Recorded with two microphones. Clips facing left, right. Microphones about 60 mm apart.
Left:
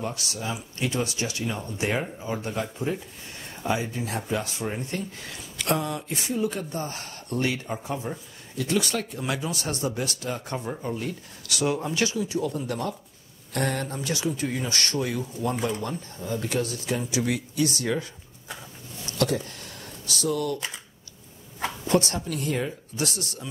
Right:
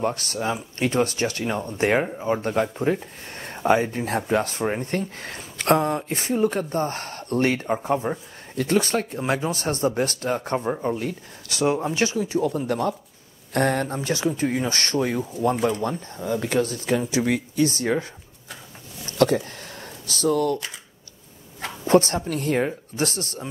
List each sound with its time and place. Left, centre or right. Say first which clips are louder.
0.0 s speech: right 7 dB; right
19.0 s a sound: right 6 dB; right
21.8 s speech: right 6 dB; right